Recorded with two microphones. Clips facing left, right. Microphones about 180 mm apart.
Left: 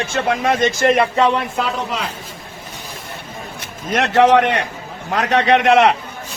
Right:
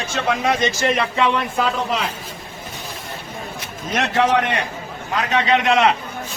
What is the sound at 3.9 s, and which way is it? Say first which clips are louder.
A man's voice: left 5 dB; 65° left (ahead or behind).